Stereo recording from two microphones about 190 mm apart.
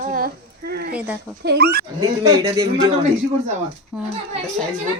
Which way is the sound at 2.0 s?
20° right (ahead or behind).